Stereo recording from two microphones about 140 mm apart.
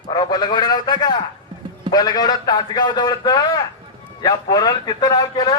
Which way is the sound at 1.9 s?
30° left (ahead or behind).